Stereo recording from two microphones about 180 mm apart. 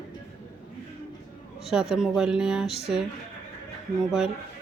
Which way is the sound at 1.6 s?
Centre (ahead or behind).